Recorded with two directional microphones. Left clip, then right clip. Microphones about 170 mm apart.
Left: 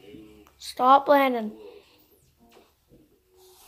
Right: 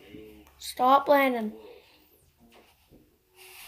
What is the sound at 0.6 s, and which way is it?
Speech, 10° left (ahead or behind).